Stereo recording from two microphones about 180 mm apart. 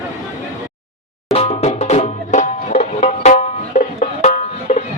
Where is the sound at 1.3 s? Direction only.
35° left (ahead or behind).